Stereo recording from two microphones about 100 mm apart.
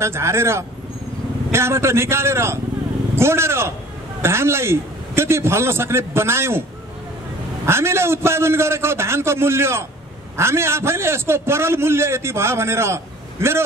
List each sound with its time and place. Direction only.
0.0 s a man's voice: 25° right (ahead or behind)
7.6 s a man's voice: 25° right (ahead or behind)